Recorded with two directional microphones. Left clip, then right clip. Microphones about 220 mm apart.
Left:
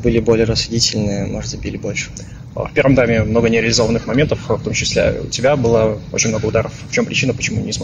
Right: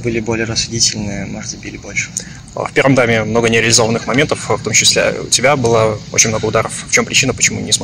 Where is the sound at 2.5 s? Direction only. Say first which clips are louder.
Right 2 dB; 25° right (ahead or behind).